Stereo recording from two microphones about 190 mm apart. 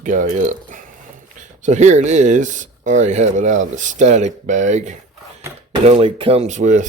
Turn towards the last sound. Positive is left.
turn(degrees=-40)  # may be behind; listen again after turning